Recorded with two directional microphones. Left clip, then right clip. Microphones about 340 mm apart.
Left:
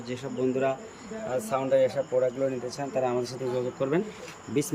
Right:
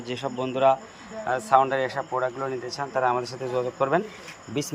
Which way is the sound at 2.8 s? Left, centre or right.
Right.